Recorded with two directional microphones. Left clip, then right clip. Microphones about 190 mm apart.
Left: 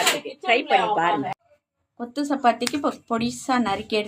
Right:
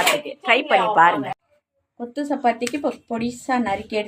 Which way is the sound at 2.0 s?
15° left (ahead or behind).